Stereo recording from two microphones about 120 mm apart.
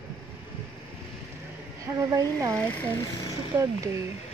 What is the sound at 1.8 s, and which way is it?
Speech, 30° right (ahead or behind).